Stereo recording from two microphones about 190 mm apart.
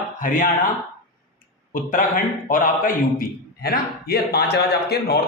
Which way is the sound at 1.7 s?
45° left (ahead or behind).